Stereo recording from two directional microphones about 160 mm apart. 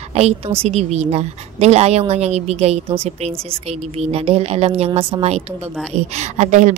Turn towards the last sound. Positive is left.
turn(degrees=-50)  # may be behind; listen again after turning